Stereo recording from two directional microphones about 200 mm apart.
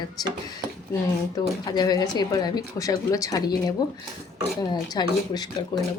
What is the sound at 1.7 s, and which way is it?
A woman's voice, 20° left (ahead or behind).